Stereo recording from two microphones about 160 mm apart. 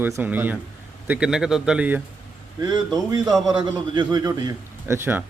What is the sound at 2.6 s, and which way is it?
A man's voice, 25° right (ahead or behind).